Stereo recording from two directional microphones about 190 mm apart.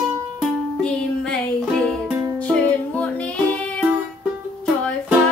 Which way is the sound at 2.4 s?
5° left (ahead or behind).